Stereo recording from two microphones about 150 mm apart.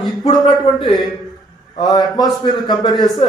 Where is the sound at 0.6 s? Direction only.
30° left (ahead or behind).